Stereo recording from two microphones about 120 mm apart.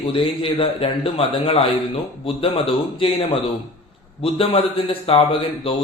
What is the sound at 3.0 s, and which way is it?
A man's voice, 40° left (ahead or behind).